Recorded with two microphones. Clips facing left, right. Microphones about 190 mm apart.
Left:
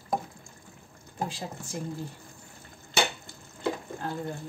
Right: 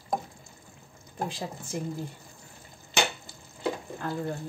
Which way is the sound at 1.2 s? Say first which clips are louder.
Right 1 dB; 55° right (ahead or behind).